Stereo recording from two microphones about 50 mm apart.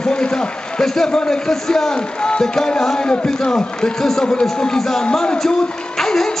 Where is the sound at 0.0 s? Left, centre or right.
Centre.